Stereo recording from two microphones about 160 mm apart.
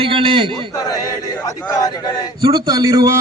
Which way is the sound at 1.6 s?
20° left (ahead or behind).